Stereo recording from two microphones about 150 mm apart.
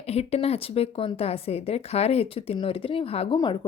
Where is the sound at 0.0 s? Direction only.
45° left (ahead or behind).